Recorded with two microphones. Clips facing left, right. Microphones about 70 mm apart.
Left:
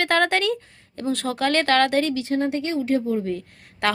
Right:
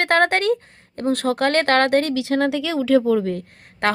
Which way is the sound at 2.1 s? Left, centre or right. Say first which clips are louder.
Right 3 dB; right.